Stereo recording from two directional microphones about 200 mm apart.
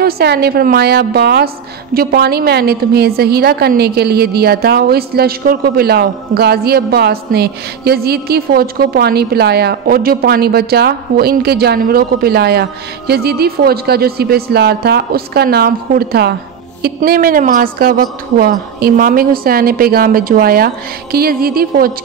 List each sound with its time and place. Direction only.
0.0 s a woman's voice: 55° right (ahead or behind)